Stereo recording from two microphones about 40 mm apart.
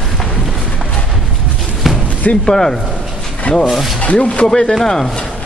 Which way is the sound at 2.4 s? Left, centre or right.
Centre.